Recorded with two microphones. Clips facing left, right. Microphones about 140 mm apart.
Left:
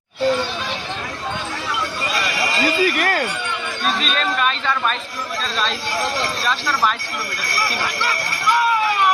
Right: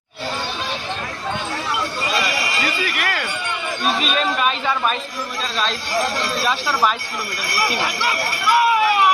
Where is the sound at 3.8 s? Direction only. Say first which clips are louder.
Right 2 dB; 5° right (ahead or behind).